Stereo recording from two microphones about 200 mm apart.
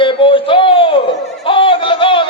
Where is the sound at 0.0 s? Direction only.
25° left (ahead or behind).